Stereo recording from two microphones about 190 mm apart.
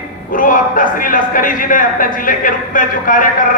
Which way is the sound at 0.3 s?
45° left (ahead or behind).